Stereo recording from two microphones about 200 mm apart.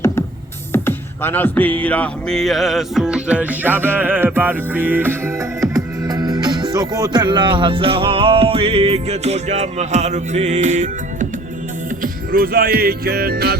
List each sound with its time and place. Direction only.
0.7 s music: 10° left (ahead or behind); by 13.6 s 50° right (ahead or behind)